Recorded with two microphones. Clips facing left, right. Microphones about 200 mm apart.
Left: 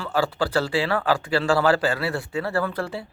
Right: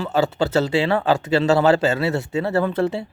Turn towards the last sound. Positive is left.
turn(degrees=-25)  # may be behind; listen again after turning